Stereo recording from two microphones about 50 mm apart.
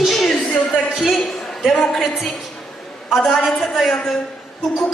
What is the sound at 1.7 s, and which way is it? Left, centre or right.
Speech, centre.